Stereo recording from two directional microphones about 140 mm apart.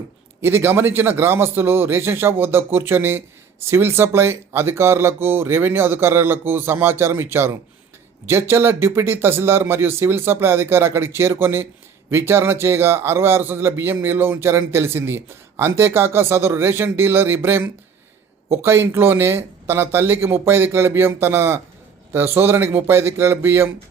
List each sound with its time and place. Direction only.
0.4 s a man's voice: 15° right (ahead or behind)